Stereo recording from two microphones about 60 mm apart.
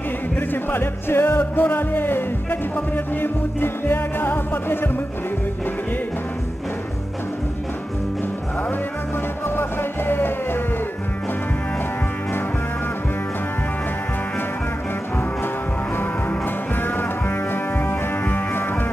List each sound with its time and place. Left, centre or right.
0.7 s music: left
9.6 s music: left
17.8 s music: left